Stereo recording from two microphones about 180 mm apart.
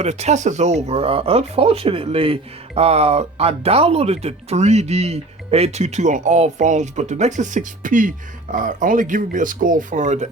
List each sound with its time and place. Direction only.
0.0 s speech: 35° right (ahead or behind)